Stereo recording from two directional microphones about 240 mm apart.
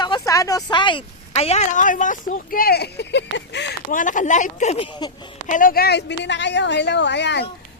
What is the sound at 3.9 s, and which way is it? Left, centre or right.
Speech, left.